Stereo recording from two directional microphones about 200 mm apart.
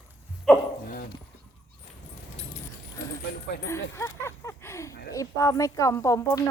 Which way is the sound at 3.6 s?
15° left (ahead or behind).